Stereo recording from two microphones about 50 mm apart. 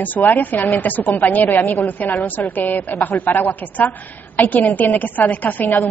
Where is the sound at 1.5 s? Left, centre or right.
Left.